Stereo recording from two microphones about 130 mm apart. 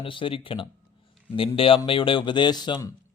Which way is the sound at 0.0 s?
40° left (ahead or behind).